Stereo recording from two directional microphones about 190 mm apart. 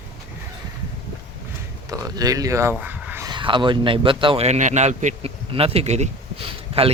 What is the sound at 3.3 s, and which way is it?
Speech, 25° right (ahead or behind).